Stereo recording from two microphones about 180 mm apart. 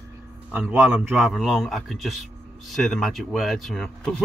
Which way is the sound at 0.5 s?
5° right (ahead or behind).